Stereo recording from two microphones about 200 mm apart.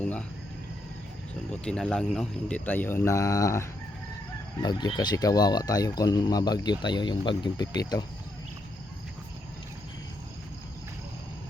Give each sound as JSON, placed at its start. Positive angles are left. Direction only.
{"t": 0.0, "sound": "speech", "side_deg": 5}
{"t": 1.5, "sound": "speech", "side_deg": 5}